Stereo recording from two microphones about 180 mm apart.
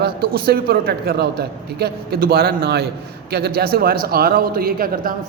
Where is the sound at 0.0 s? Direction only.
60° right (ahead or behind).